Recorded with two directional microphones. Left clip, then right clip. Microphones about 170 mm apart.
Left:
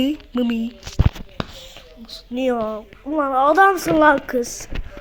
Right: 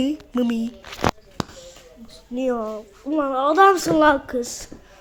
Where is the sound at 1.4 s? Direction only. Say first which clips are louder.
Left 1 dB; 60° right (ahead or behind).